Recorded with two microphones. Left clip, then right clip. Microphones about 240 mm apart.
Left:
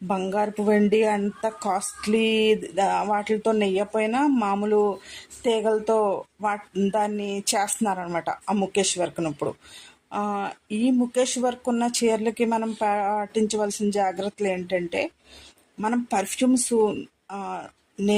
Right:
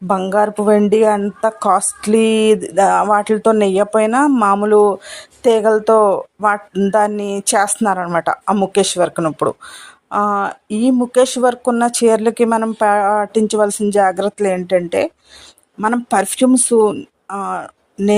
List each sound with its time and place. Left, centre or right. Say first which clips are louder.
0.1 s speech: right 10 dB; right